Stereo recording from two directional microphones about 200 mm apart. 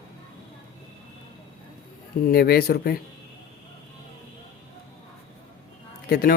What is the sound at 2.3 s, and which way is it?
Speech, 50° left (ahead or behind).